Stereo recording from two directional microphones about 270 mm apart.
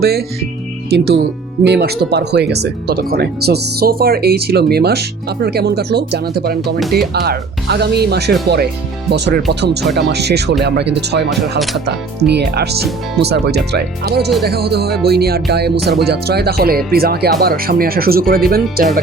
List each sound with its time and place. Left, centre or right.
0.0 s speech: right